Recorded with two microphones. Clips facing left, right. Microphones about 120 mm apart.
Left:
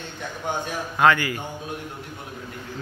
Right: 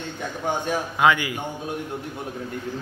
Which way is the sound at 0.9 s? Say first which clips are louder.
Left 2 dB; 10° right (ahead or behind).